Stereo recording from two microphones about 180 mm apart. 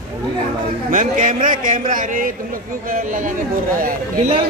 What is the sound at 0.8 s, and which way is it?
Speech, 50° right (ahead or behind).